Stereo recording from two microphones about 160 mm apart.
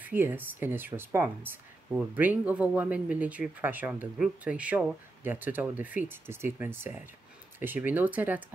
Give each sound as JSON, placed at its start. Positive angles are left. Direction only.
{"t": 0.0, "sound": "speech", "side_deg": -10}